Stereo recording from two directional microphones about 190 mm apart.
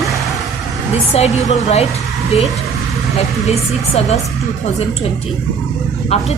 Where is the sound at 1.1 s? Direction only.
35° left (ahead or behind).